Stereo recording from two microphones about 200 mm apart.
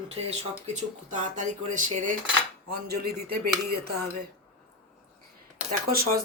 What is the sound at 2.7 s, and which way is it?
Speech, 50° right (ahead or behind).